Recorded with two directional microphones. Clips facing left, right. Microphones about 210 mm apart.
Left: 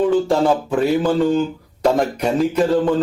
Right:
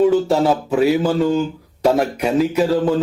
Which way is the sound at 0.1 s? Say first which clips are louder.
Even; 10° right (ahead or behind).